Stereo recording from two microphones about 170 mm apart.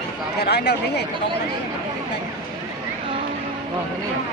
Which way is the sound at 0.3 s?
75° left (ahead or behind).